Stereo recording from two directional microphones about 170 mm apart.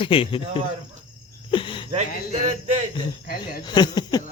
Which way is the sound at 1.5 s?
30° left (ahead or behind).